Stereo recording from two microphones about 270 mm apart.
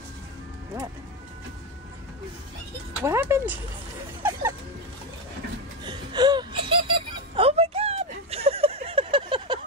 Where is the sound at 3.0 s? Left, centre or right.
Centre.